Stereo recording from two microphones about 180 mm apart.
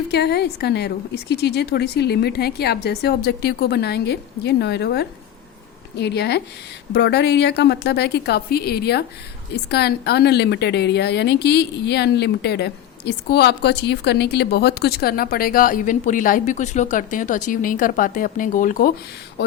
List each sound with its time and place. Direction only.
0.1 s a woman's voice: 65° left (ahead or behind); by 18.9 s 50° left (ahead or behind)